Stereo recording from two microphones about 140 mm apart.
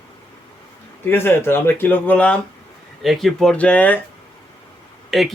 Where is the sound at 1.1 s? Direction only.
15° left (ahead or behind).